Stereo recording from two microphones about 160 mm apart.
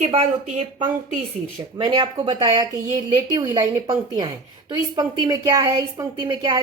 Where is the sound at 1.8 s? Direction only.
25° right (ahead or behind).